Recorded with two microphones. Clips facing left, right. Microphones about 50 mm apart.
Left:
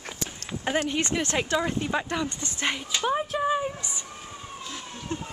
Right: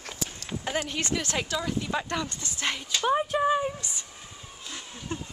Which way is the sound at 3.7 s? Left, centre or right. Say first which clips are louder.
Left 2 dB; centre.